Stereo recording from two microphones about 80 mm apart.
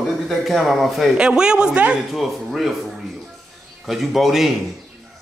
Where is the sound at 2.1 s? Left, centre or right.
Centre.